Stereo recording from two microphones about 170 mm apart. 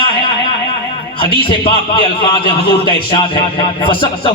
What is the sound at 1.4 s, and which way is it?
A man's voice, 30° left (ahead or behind).